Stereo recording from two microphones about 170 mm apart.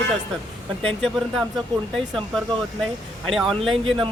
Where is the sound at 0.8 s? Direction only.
5° left (ahead or behind).